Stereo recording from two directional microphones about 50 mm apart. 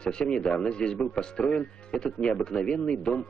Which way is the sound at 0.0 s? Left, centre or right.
Centre.